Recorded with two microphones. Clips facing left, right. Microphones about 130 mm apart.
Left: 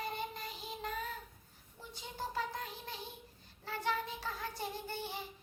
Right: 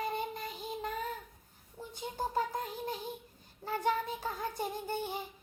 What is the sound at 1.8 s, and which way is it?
Child singing, 50° right (ahead or behind).